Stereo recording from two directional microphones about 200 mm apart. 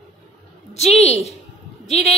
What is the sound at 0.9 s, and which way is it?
Speech, 30° left (ahead or behind).